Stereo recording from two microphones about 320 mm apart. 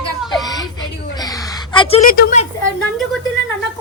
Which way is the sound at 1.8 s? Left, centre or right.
Centre.